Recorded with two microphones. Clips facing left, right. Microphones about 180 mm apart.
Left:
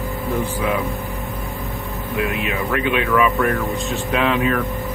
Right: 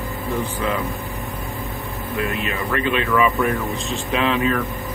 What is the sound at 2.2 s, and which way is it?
Speech, 10° left (ahead or behind).